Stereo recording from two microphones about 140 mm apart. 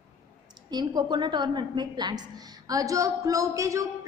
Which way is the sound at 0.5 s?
30° right (ahead or behind).